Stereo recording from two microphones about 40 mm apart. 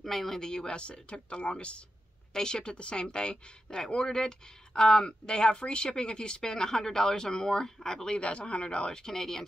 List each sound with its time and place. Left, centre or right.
0.0 s speech: centre
0.7 s speech: left
2.3 s speech: centre
8.2 s speech: left; by 9.5 s centre